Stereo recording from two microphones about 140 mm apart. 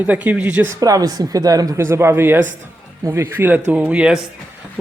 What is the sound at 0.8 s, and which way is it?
Speech, 25° right (ahead or behind).